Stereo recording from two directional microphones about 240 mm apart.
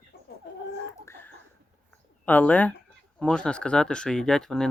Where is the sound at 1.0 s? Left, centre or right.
Centre.